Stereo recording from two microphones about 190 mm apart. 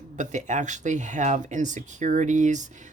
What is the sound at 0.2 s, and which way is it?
Speech, 40° right (ahead or behind).